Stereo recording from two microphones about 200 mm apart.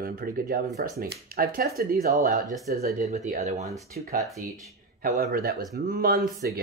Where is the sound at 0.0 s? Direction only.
45° right (ahead or behind).